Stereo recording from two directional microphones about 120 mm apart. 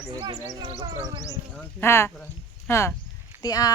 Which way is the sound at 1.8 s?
20° left (ahead or behind).